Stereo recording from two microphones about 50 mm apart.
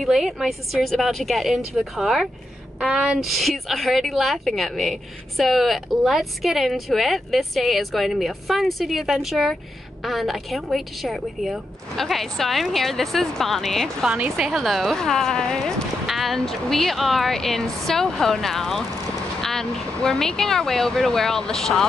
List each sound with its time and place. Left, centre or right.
0.0 s speech: centre
2.9 s a woman's voice: centre
3.2 s speech: centre
16.1 s speech: centre